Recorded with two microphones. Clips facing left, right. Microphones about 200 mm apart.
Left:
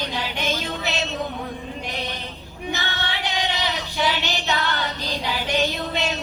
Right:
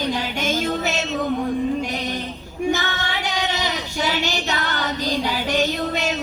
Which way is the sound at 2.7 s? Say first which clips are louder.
Right 3 dB; 45° right (ahead or behind).